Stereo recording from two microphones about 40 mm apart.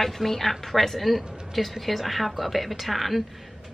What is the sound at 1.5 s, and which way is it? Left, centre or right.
A woman's voice, centre.